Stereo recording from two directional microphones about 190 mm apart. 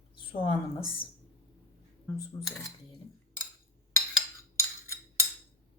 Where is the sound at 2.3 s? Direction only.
15° left (ahead or behind).